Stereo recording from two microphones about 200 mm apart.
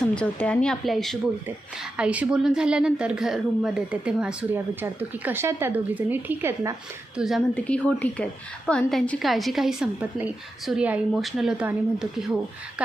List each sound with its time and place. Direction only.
0.1 s a woman's voice: 5° left (ahead or behind); by 6.7 s 15° right (ahead or behind)
7.2 s a woman's voice: centre (ahead or behind)